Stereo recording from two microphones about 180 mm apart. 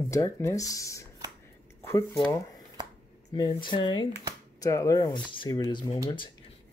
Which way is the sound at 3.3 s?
25° left (ahead or behind).